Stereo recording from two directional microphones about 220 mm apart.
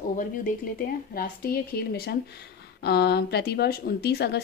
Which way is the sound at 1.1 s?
40° left (ahead or behind).